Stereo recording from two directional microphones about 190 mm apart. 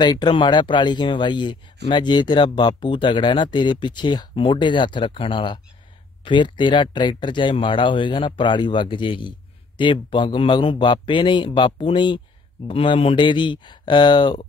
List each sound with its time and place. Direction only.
0.0 s speech: 20° left (ahead or behind)